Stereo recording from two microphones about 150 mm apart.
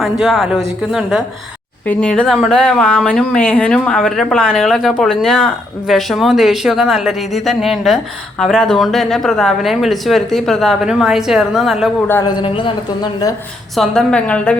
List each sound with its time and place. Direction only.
0.0 s speech: centre (ahead or behind)
1.9 s speech: 10° left (ahead or behind)
12.2 s speech: 30° left (ahead or behind)
13.7 s a woman's voice: 5° left (ahead or behind)